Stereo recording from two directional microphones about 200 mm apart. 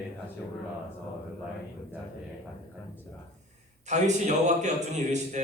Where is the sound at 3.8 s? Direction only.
35° right (ahead or behind).